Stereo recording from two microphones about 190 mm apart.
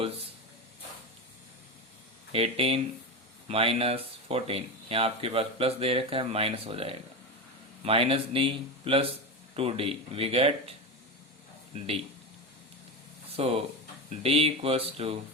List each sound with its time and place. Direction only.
0.0 s speech: 30° right (ahead or behind)
2.3 s speech: 30° right (ahead or behind)
13.3 s speech: 30° right (ahead or behind)